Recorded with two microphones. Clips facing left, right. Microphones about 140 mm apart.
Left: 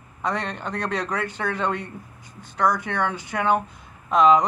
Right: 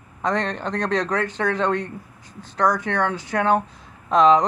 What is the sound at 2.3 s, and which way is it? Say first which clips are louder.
A woman's voice: right 2 dB; 35° right (ahead or behind).